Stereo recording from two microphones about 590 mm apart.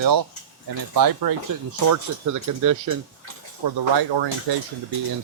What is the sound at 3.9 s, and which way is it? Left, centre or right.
Speech, right.